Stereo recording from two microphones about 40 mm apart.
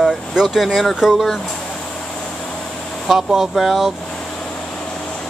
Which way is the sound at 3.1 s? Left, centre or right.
Centre.